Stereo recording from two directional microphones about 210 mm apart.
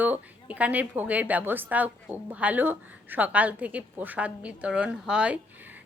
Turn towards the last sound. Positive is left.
turn(degrees=-5)  # may be behind; listen again after turning